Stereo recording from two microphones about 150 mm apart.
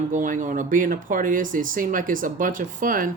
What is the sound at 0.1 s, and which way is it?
A woman's voice, 60° right (ahead or behind).